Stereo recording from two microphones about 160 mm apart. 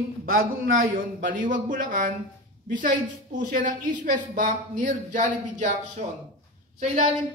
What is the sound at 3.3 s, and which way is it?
A woman's voice, 60° right (ahead or behind).